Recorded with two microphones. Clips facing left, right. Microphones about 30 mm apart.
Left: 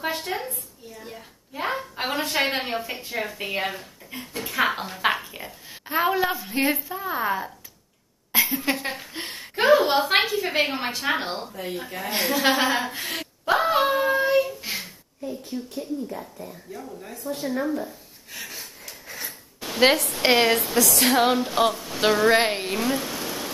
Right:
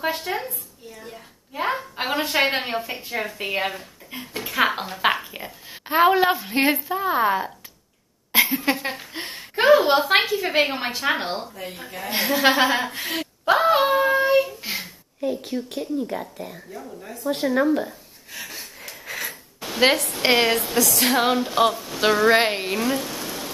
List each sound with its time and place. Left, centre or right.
0.0 s a sound: centre
2.0 s a woman's voice: centre
5.9 s speech: right
8.3 s a sound: right
8.5 s a woman's voice: centre
12.6 s child singing: centre
15.2 s speech: right
18.3 s a sound: centre
19.6 s speech: centre